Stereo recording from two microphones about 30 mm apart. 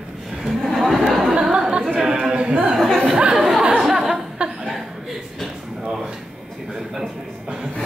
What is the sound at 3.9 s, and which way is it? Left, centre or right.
Chuckle, centre.